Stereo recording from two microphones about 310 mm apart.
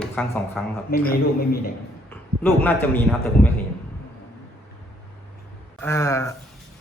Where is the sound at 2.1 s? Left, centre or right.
Centre.